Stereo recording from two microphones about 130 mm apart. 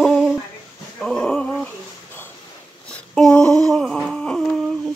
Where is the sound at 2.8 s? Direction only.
5° left (ahead or behind).